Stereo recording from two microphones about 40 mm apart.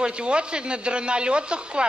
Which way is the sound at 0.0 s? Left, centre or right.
Right.